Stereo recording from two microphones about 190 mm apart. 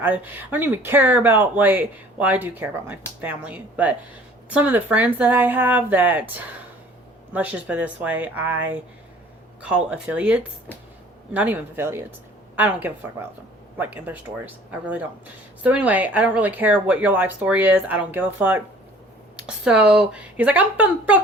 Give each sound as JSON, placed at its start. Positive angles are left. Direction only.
{"t": 0.0, "sound": "speech", "side_deg": -10}
{"t": 7.3, "sound": "speech", "side_deg": -5}